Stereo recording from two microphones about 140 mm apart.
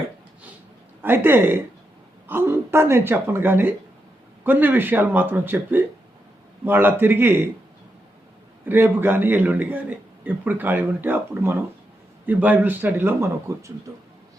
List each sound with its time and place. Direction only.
1.0 s speech: 15° right (ahead or behind)
8.6 s speech: 15° right (ahead or behind)